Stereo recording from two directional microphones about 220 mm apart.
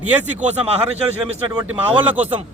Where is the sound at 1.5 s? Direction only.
10° right (ahead or behind).